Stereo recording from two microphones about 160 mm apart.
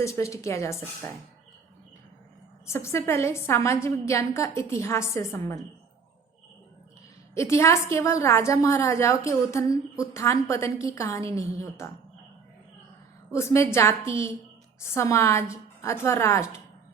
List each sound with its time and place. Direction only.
0.0 s a woman's voice: 20° left (ahead or behind)
2.6 s a woman's voice: 15° left (ahead or behind)
7.3 s a woman's voice: 15° left (ahead or behind)
13.3 s a woman's voice: 15° left (ahead or behind)